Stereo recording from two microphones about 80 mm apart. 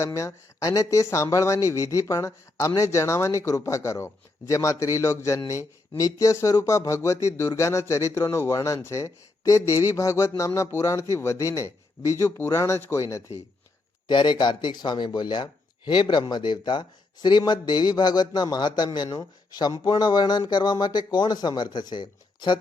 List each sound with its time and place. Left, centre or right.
0.0 s speech: left
14.1 s speech: left
15.9 s speech: left